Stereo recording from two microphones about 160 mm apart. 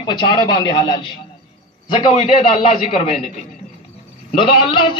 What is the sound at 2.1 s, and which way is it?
A man's voice, 40° left (ahead or behind).